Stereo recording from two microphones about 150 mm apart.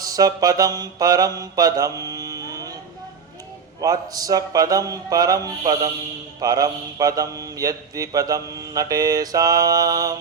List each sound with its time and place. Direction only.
0.0 s mantra: 25° right (ahead or behind)
3.8 s mantra: 25° right (ahead or behind)